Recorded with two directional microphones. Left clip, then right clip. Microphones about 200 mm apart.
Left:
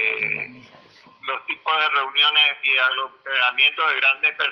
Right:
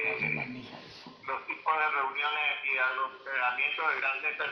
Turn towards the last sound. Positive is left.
turn(degrees=55)  # may be behind; listen again after turning